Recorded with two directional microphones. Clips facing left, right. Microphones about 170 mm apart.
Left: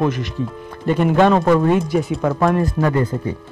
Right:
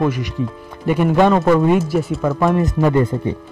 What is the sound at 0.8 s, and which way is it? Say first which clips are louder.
Speech: even; 10° right (ahead or behind).